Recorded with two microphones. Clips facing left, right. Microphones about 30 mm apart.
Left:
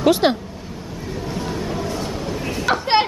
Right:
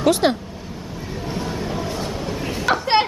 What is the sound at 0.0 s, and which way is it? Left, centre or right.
Speech, centre.